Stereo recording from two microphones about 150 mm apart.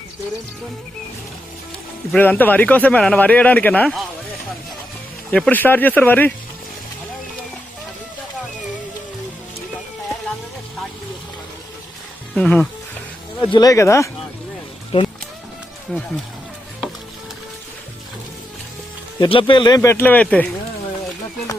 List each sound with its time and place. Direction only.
2.1 s speech: 10° left (ahead or behind)
5.3 s speech: 10° left (ahead or behind)
12.3 s speech: 5° left (ahead or behind)
13.4 s speech: 30° left (ahead or behind)
14.9 s speech: 35° left (ahead or behind)
15.9 s speech: 5° left (ahead or behind)
19.2 s speech: 35° left (ahead or behind); by 20.5 s 10° left (ahead or behind)